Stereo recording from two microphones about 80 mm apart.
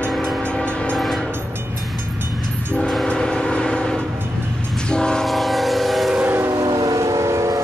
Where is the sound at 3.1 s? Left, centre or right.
Centre.